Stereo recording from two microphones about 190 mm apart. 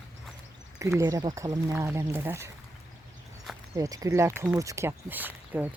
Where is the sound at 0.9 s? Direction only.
15° right (ahead or behind).